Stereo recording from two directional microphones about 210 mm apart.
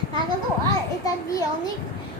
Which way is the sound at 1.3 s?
15° left (ahead or behind).